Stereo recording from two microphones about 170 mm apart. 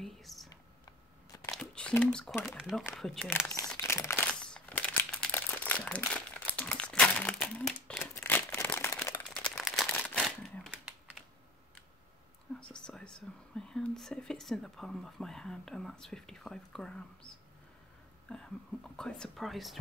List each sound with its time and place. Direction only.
0.0 s whispering: centre (ahead or behind)
0.5 s camera: 20° left (ahead or behind)
1.5 s crumpling: 5° left (ahead or behind)
2.1 s speech: 5° left (ahead or behind)
3.7 s crumpling: 15° left (ahead or behind)
9.3 s crumpling: 5° left (ahead or behind)
12.7 s speech: 5° left (ahead or behind)
18.3 s speech: 5° left (ahead or behind)